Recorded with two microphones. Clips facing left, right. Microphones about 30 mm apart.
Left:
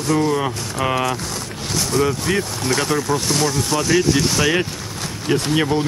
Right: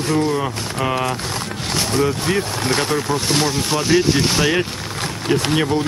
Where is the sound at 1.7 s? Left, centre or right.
Right.